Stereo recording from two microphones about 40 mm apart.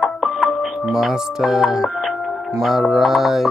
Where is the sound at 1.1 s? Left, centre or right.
Centre.